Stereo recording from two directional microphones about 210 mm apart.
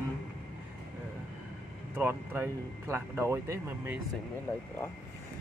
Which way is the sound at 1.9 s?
10° right (ahead or behind).